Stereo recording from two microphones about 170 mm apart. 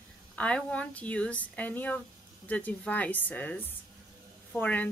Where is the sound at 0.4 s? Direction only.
5° left (ahead or behind).